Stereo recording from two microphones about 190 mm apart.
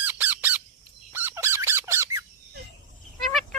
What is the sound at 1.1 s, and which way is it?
Squeak, 10° right (ahead or behind).